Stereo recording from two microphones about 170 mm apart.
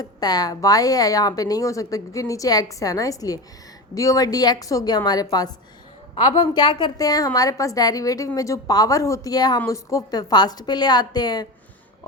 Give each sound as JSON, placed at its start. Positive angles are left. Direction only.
{"t": 0.0, "sound": "a woman's voice", "side_deg": 25}